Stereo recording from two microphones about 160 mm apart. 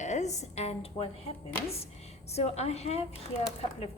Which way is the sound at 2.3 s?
40° left (ahead or behind).